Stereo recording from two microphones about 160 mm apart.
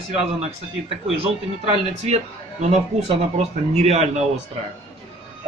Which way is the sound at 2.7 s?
45° right (ahead or behind).